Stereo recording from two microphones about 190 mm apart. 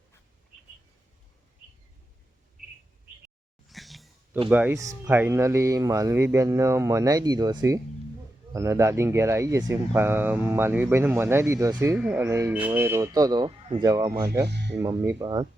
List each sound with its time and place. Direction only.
3.7 s a sound: centre (ahead or behind)
4.4 s speech: 10° right (ahead or behind)
14.4 s speech: 65° right (ahead or behind)
14.8 s speech: 15° right (ahead or behind)